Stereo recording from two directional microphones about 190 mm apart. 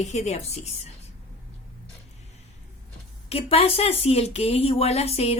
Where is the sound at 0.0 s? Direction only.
35° left (ahead or behind).